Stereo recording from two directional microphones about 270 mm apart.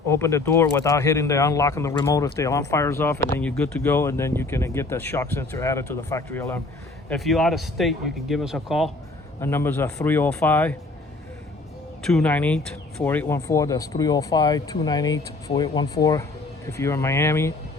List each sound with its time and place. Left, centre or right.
0.1 s speech: centre
12.0 s speech: centre